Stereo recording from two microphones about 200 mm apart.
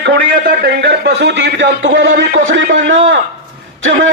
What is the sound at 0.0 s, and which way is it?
A man's voice, 55° right (ahead or behind).